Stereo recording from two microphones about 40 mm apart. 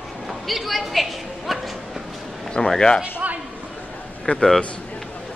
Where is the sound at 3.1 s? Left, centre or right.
Right.